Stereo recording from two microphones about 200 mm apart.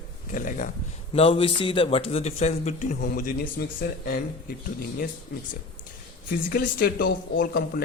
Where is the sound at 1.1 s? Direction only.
25° left (ahead or behind); by 4.2 s 45° left (ahead or behind).